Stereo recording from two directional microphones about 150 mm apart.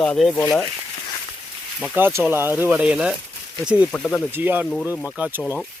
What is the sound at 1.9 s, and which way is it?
Speech, 15° right (ahead or behind).